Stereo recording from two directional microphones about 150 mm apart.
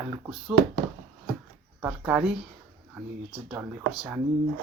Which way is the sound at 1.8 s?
10° right (ahead or behind).